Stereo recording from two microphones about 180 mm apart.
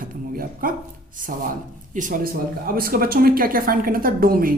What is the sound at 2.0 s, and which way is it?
Speech, 45° right (ahead or behind).